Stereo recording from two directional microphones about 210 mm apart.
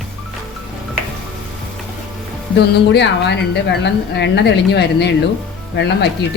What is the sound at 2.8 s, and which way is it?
A woman's voice, 55° left (ahead or behind).